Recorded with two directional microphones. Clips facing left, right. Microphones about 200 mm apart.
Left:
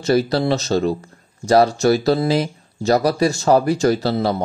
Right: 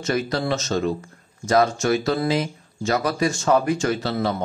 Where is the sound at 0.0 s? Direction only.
35° left (ahead or behind).